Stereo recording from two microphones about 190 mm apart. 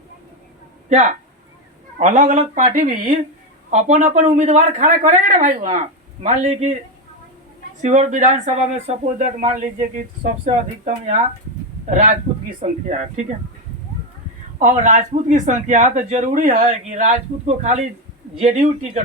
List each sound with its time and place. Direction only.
0.9 s speech: 40° right (ahead or behind)
7.8 s speech: 40° right (ahead or behind)
14.6 s speech: 40° right (ahead or behind)